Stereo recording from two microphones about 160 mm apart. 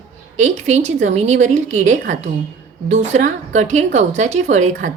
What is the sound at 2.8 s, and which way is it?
A woman's voice, 45° right (ahead or behind).